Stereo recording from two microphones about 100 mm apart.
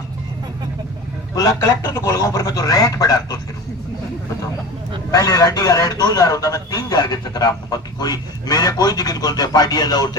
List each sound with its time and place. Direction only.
1.4 s a man's voice: 35° left (ahead or behind)
5.1 s a man's voice: 40° left (ahead or behind)